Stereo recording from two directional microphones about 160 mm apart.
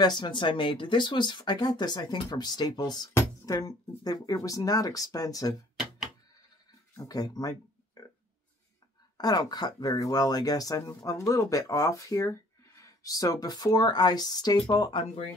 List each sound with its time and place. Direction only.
0.0 s speech: 25° left (ahead or behind)
7.0 s speech: 25° left (ahead or behind)
9.2 s speech: 25° left (ahead or behind)